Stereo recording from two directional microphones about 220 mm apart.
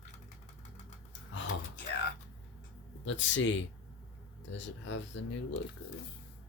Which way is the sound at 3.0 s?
55° left (ahead or behind).